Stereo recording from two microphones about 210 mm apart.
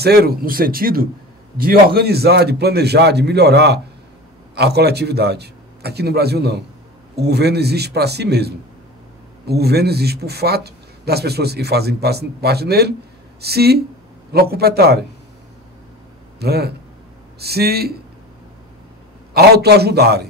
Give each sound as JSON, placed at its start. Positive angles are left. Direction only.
{"t": 0.0, "sound": "a man's voice", "side_deg": -50}
{"t": 16.3, "sound": "a man's voice", "side_deg": -50}
{"t": 19.3, "sound": "a man's voice", "side_deg": -50}